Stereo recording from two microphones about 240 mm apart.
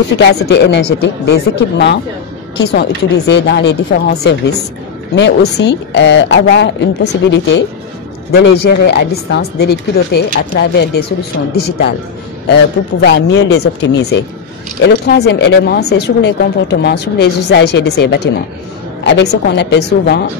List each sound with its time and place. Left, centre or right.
0.3 s speech: left
13.0 s speech: left